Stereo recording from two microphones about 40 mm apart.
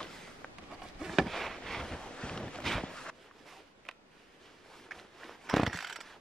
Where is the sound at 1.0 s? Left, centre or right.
Centre.